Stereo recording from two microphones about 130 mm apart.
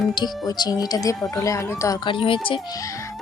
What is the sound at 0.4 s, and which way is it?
Speech, 30° left (ahead or behind).